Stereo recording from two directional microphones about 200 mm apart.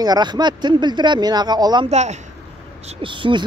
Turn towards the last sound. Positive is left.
turn(degrees=-25)  # may be behind; listen again after turning